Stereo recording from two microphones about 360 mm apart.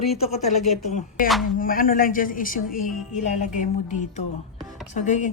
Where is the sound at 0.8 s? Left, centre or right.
Centre.